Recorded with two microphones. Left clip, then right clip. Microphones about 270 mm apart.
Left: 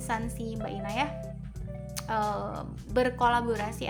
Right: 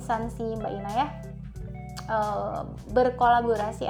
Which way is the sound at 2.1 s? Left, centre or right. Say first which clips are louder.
Right 3 dB; centre.